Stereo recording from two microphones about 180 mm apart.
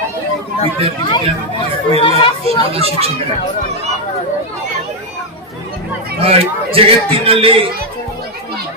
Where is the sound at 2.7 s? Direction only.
35° right (ahead or behind).